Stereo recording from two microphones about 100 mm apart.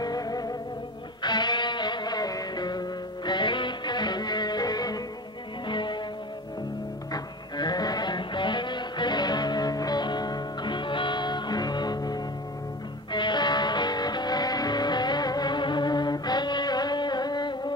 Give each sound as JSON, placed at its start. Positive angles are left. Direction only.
{"t": 0.0, "sound": "music", "side_deg": 40}
{"t": 7.1, "sound": "music", "side_deg": 45}